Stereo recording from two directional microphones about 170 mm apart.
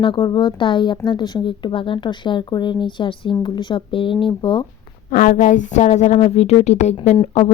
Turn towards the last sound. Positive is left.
turn(degrees=30)  # may be behind; listen again after turning